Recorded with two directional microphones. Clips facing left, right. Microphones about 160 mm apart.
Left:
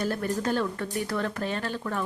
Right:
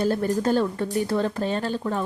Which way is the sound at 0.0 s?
30° right (ahead or behind).